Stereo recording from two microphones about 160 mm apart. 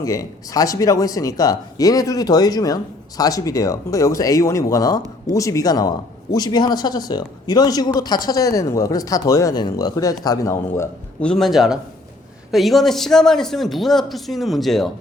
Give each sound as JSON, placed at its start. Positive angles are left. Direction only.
{"t": 0.0, "sound": "speech", "side_deg": 20}
{"t": 11.3, "sound": "a man's voice", "side_deg": 0}